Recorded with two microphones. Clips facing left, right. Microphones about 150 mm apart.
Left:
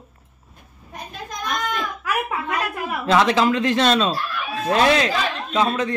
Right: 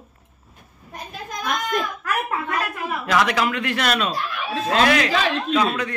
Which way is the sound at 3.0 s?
25° left (ahead or behind).